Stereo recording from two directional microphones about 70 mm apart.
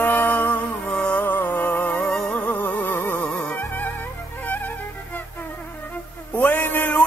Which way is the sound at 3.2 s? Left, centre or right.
Centre.